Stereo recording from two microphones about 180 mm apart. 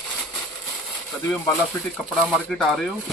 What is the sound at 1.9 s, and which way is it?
Speech, 5° left (ahead or behind).